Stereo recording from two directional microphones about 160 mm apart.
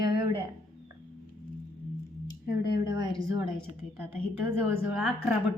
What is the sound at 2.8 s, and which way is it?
A woman's voice, 20° right (ahead or behind).